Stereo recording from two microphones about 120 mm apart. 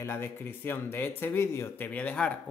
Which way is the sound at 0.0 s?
20° left (ahead or behind).